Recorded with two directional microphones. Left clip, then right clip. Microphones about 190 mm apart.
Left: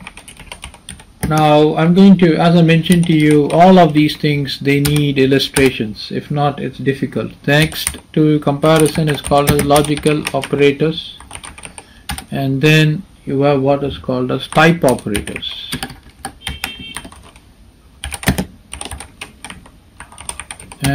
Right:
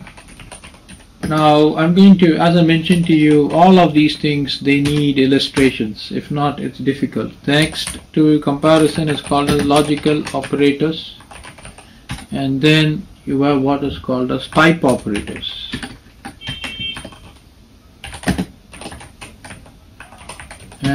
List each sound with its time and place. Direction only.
1.3 s speech: 40° left (ahead or behind)
12.3 s speech: 35° left (ahead or behind)